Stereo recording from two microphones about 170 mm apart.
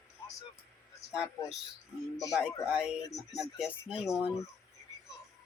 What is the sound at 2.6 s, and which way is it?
Speech, 5° right (ahead or behind).